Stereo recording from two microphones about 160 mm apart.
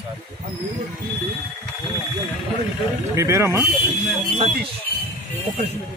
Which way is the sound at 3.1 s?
15° right (ahead or behind).